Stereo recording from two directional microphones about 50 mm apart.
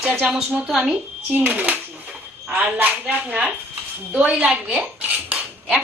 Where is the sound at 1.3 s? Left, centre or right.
Right.